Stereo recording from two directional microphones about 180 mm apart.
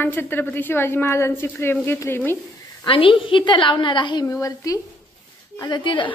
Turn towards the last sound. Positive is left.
turn(degrees=25)  # may be behind; listen again after turning